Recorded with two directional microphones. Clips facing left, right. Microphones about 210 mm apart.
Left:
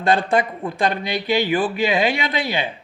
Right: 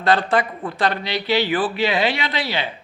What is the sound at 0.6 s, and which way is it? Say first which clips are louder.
Speech: left 1 dB; 15° left (ahead or behind).